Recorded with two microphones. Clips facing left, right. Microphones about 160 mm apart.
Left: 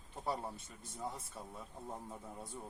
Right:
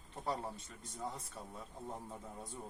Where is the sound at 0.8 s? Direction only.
5° left (ahead or behind).